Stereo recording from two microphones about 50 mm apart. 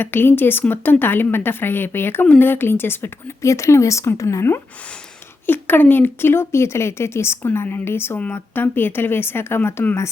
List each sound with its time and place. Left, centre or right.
0.0 s speech: left
3.4 s speech: left
5.5 s speech: left
8.3 s speech: left